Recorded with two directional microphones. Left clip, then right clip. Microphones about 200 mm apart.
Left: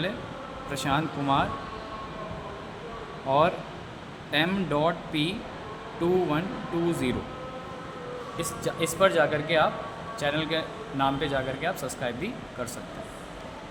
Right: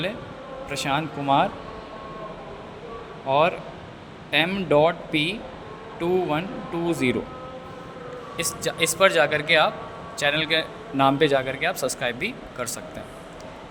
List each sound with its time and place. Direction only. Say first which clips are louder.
0.7 s speech: right 2 dB; 25° right (ahead or behind)
3.2 s speech: right 3 dB; 25° right (ahead or behind)
8.4 s a man's voice: right 5 dB; 40° right (ahead or behind)